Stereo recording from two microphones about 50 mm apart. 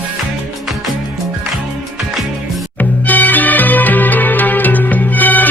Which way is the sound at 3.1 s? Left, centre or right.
Left.